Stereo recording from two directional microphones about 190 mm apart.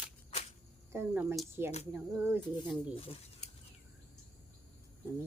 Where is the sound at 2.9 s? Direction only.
30° left (ahead or behind).